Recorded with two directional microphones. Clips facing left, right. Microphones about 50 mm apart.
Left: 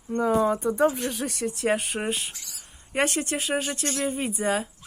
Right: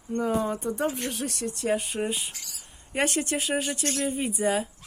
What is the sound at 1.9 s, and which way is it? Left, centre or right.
Speech, left.